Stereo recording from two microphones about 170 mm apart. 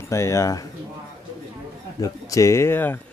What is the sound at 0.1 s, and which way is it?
Speech, 15° left (ahead or behind).